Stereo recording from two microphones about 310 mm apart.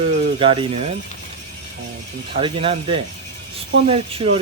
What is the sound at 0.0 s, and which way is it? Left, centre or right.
Speech, centre.